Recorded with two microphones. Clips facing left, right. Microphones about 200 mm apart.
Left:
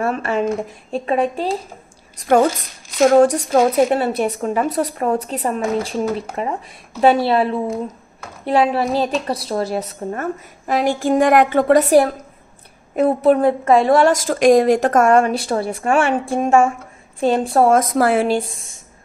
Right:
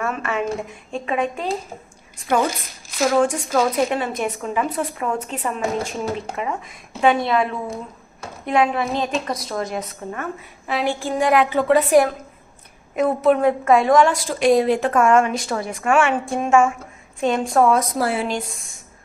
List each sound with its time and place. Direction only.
0.0 s speech: 35° left (ahead or behind)
2.1 s a woman's voice: 45° left (ahead or behind)
17.7 s a woman's voice: 50° left (ahead or behind)